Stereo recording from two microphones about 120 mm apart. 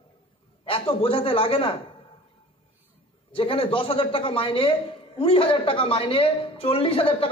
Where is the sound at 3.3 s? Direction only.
50° left (ahead or behind).